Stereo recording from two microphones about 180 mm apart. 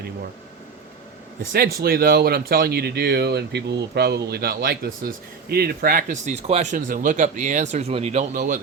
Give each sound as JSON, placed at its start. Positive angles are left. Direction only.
{"t": 1.4, "sound": "speech", "side_deg": -55}